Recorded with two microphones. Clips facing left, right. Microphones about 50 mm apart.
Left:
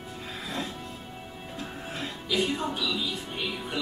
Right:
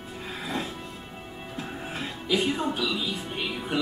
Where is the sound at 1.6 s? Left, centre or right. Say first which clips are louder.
Right 2 dB; centre.